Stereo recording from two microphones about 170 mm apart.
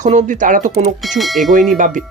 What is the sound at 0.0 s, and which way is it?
Speech, 45° right (ahead or behind).